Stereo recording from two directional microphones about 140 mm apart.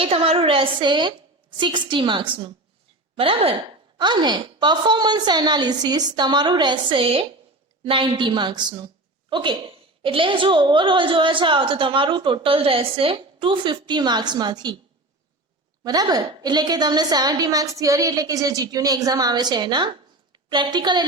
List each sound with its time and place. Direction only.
0.0 s a woman's voice: 45° right (ahead or behind)
15.8 s a woman's voice: 30° right (ahead or behind)